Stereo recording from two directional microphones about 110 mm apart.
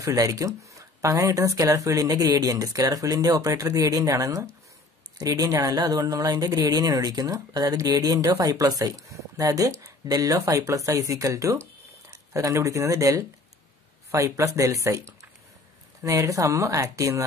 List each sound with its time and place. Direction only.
0.0 s speech: 30° right (ahead or behind)